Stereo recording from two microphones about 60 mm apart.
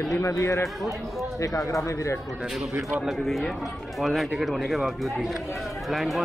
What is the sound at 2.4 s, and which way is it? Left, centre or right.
Speech, centre.